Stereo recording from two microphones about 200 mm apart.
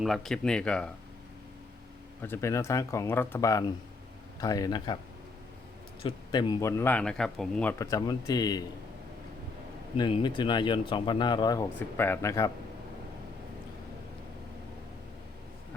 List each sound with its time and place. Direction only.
0.0 s speech: centre (ahead or behind)
2.2 s speech: 10° left (ahead or behind)
6.0 s speech: 25° left (ahead or behind)
10.0 s speech: 25° left (ahead or behind)